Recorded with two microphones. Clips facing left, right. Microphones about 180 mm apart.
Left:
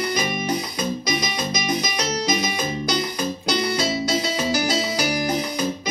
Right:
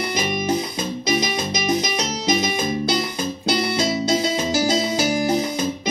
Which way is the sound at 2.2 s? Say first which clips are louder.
Right 3 dB; 25° right (ahead or behind).